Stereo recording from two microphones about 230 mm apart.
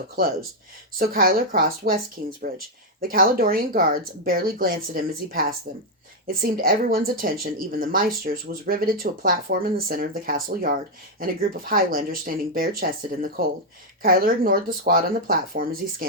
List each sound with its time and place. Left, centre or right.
0.9 s speech: right